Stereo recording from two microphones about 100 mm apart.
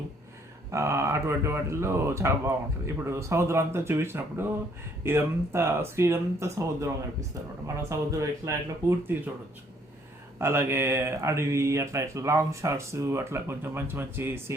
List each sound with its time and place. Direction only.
0.7 s speech: 30° right (ahead or behind)
10.3 s speech: 25° right (ahead or behind)